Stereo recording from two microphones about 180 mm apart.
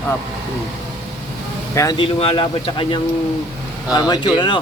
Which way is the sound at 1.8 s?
25° left (ahead or behind).